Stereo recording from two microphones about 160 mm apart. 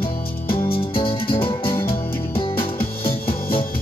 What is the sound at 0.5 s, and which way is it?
Music, 35° left (ahead or behind).